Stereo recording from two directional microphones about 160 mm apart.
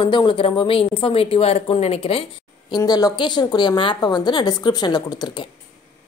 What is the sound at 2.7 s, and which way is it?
A woman's voice, 25° left (ahead or behind).